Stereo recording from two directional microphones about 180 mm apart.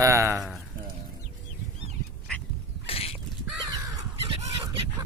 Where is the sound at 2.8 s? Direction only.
35° left (ahead or behind).